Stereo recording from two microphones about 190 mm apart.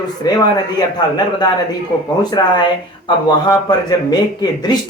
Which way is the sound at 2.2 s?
20° left (ahead or behind).